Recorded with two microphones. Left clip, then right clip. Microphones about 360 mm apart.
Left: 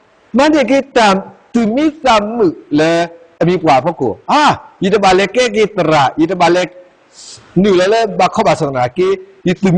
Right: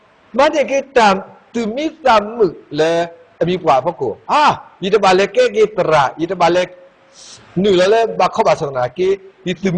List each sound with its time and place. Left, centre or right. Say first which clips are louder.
0.3 s a man's voice: left 3 dB; left
2.0 s a man's voice: even; left